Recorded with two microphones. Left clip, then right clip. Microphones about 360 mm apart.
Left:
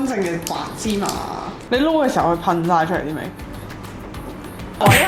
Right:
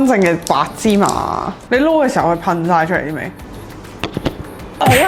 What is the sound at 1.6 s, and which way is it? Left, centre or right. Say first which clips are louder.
A woman's voice: right 4 dB; right.